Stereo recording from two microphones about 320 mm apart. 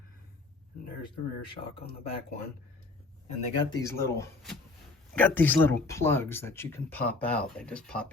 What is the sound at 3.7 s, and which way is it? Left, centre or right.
Speech, centre.